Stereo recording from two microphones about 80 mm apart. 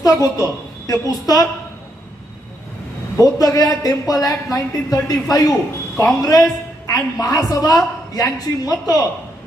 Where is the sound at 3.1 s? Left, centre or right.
Left.